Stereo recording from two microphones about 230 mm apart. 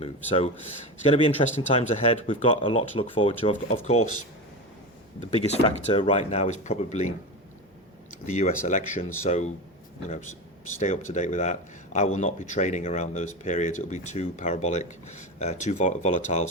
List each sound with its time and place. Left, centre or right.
0.3 s speech: left
5.5 s speech: left
8.3 s speech: left